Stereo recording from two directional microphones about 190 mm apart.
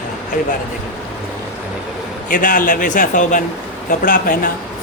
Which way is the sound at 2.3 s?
45° left (ahead or behind).